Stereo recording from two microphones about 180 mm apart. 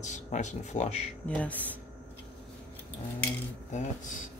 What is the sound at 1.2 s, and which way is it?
Speech, 5° left (ahead or behind).